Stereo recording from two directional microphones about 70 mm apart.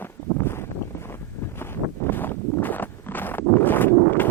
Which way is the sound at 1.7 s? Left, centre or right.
Left.